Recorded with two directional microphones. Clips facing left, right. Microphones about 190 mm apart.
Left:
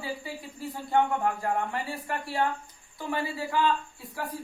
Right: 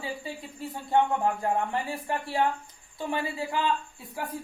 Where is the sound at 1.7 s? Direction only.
20° right (ahead or behind).